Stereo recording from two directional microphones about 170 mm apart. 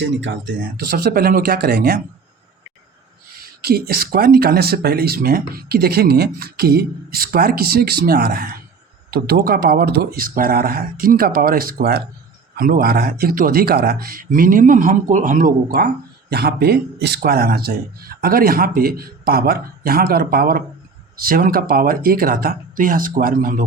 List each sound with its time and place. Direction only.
0.0 s speech: 90° right; by 2.0 s 65° right (ahead or behind)
3.4 s speech: 65° right (ahead or behind)
16.3 s speech: 70° right (ahead or behind); by 23.6 s 50° right (ahead or behind)